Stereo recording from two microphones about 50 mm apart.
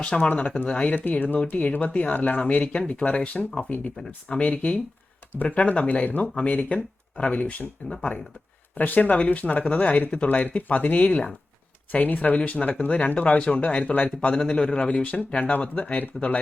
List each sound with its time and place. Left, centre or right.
0.2 s speech: left
0.7 s speech: left
0.9 s speech: left
2.7 s speech: left
4.4 s speech: left
6.2 s speech: left
8.7 s speech: left